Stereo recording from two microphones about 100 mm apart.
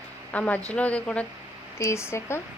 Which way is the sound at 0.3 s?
15° left (ahead or behind).